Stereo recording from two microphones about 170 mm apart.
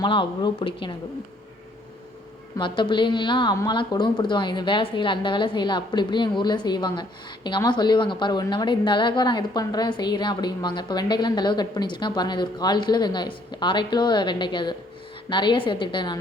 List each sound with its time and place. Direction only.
0.0 s a woman's voice: 25° left (ahead or behind)
2.6 s a woman's voice: 30° left (ahead or behind)